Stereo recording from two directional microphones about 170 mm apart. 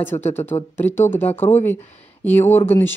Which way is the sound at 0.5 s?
35° left (ahead or behind).